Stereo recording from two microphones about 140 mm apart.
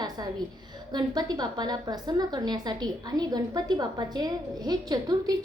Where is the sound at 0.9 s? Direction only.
30° right (ahead or behind).